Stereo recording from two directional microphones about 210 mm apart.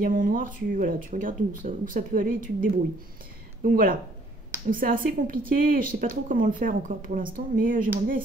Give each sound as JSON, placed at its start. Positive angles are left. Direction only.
{"t": 0.0, "sound": "a woman's voice", "side_deg": -40}